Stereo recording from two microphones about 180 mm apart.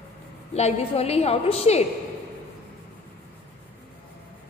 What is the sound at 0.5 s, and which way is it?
A woman's voice, 35° left (ahead or behind).